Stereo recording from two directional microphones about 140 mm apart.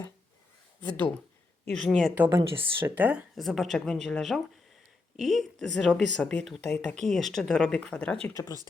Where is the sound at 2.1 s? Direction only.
10° right (ahead or behind).